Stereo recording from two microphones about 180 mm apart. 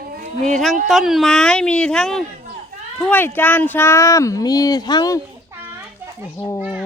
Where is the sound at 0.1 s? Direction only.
55° right (ahead or behind).